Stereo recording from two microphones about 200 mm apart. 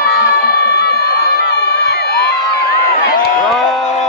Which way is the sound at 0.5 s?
55° left (ahead or behind).